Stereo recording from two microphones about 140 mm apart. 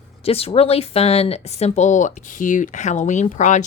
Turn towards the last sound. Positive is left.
turn(degrees=60)  # may be behind; listen again after turning